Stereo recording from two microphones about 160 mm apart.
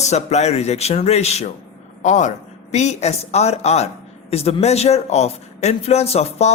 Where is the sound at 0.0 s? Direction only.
45° left (ahead or behind).